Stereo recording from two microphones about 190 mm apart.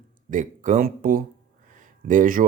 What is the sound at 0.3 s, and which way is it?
Speech, 40° right (ahead or behind).